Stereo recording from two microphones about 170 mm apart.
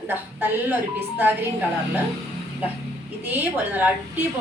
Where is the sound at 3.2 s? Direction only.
10° right (ahead or behind).